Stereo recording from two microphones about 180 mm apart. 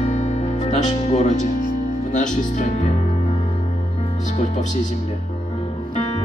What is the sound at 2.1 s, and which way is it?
Speech, 45° left (ahead or behind).